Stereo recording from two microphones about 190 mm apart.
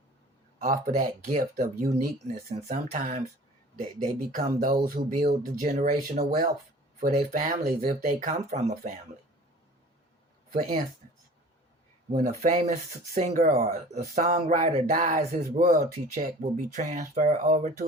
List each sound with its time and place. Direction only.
0.6 s speech: 45° right (ahead or behind)
12.1 s speech: 35° right (ahead or behind)